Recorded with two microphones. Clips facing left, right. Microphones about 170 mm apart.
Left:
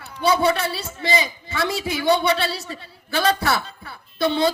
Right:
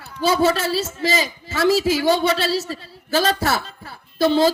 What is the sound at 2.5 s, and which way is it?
A woman's voice, 35° right (ahead or behind).